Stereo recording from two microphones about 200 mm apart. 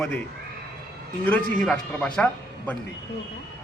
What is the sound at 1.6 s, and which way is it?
A man's voice, 5° left (ahead or behind).